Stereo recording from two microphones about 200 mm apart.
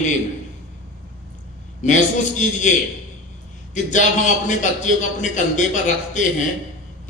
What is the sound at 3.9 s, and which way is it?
A man's voice, 35° left (ahead or behind).